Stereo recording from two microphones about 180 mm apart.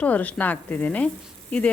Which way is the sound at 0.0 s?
10° left (ahead or behind).